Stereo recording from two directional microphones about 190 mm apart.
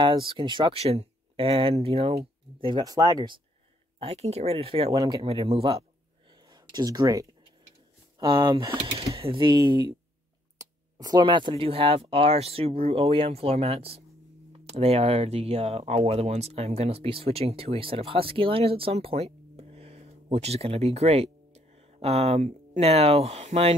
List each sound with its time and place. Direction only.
0.0 s speech: 25° right (ahead or behind)
4.0 s speech: 35° right (ahead or behind)
6.5 s speech: 20° right (ahead or behind)